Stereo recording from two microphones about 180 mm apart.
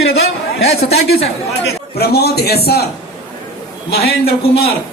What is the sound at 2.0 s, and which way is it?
Speech, 60° left (ahead or behind).